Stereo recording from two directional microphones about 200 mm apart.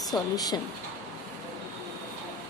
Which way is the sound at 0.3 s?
20° left (ahead or behind).